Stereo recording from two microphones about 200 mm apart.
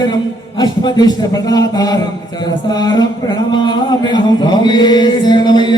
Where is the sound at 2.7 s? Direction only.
20° left (ahead or behind).